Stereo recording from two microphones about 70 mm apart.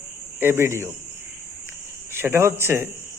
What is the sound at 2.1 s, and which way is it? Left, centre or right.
Speech, right.